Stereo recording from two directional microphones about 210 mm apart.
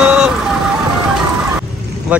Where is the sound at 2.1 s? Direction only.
5° right (ahead or behind).